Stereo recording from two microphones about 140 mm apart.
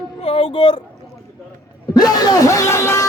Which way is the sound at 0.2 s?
40° left (ahead or behind).